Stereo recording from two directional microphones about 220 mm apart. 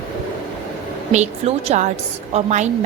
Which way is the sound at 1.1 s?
30° right (ahead or behind).